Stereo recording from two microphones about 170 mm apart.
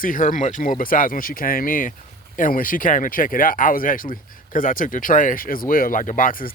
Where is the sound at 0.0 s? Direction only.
55° left (ahead or behind).